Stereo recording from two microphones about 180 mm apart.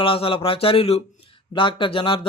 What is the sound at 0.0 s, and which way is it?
A man's voice, 30° left (ahead or behind).